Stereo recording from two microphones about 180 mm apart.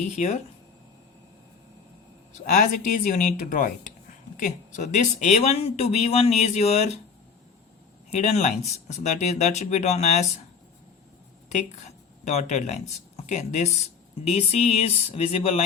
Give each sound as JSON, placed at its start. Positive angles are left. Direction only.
{"t": 2.6, "sound": "speech", "side_deg": 45}
{"t": 8.1, "sound": "speech", "side_deg": 40}
{"t": 12.2, "sound": "speech", "side_deg": 40}